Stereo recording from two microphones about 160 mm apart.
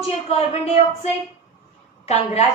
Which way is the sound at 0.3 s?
40° left (ahead or behind).